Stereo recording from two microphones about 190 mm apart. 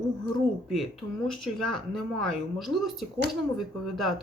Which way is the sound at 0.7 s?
Centre (ahead or behind).